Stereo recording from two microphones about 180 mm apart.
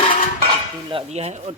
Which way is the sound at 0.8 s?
35° right (ahead or behind).